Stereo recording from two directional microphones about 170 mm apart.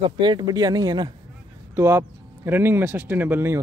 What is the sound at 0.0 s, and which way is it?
Speech, 25° right (ahead or behind).